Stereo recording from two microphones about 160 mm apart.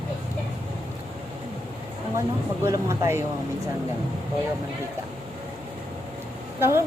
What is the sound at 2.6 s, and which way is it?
Speech, 20° right (ahead or behind).